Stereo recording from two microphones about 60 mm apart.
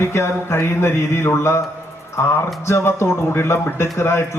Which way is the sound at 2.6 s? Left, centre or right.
Left.